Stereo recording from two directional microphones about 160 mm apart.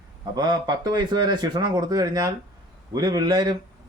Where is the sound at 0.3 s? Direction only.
25° right (ahead or behind).